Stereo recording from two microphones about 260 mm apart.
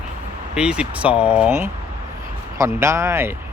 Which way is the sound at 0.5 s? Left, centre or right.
Centre.